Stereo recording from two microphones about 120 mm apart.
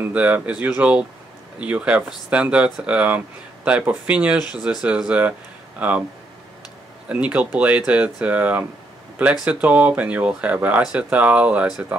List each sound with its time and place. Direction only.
0.0 s speech: 15° right (ahead or behind)
7.1 s speech: 10° right (ahead or behind)